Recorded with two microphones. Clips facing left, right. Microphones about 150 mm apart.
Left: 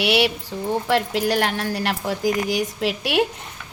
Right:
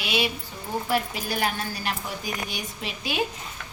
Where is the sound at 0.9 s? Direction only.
90° left.